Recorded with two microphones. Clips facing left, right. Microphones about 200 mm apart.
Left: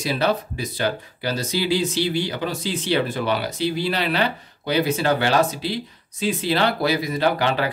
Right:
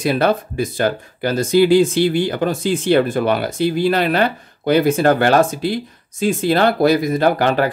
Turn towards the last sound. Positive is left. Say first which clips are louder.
# right 5 dB
turn(degrees=-50)  # may be behind; listen again after turning